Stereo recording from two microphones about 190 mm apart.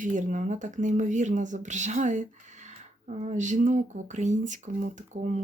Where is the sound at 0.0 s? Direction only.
45° right (ahead or behind).